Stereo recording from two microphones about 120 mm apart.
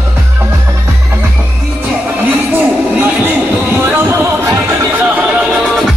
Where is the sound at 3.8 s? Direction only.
20° right (ahead or behind); by 6.0 s centre (ahead or behind).